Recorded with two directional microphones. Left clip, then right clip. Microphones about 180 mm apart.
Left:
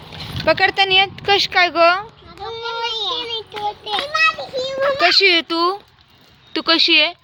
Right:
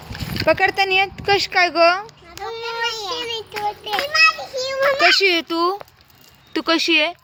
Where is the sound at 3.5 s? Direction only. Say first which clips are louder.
Even; 10° left (ahead or behind).